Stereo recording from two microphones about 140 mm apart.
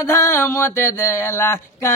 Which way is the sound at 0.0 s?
20° left (ahead or behind).